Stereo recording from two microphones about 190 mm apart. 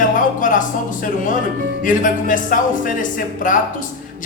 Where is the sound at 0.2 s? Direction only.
45° left (ahead or behind).